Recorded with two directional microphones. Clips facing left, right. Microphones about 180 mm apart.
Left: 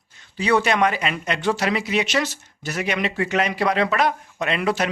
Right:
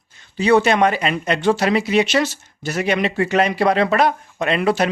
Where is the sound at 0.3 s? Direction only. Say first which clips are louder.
Right 5 dB; 25° right (ahead or behind).